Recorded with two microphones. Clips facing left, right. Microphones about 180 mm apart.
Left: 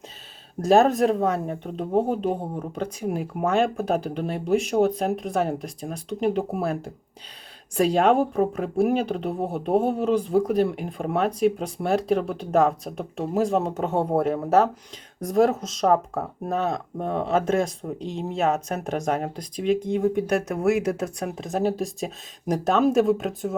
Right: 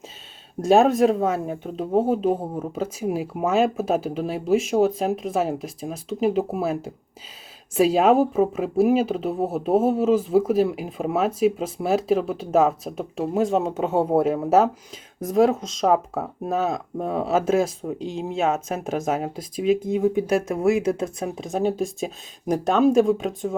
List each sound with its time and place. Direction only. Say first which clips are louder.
0.6 s speech: right 1 dB; centre (ahead or behind)